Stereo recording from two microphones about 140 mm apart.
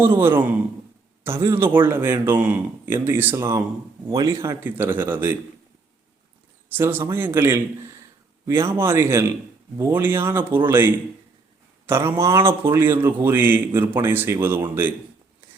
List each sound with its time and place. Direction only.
0.0 s speech: 15° right (ahead or behind)
6.7 s speech: 15° right (ahead or behind)